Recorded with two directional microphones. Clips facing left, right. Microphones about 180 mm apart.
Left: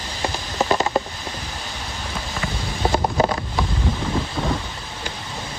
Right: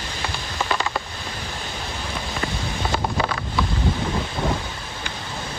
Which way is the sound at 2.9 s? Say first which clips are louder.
Left 5 dB; 25° left (ahead or behind).